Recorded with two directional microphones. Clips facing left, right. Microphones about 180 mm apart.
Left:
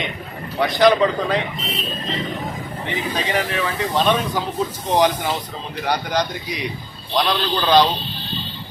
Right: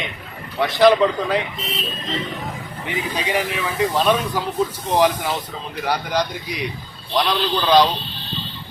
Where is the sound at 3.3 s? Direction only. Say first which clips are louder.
Even; 5° right (ahead or behind).